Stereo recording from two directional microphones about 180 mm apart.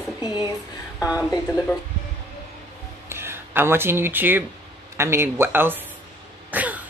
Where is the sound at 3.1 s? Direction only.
15° right (ahead or behind).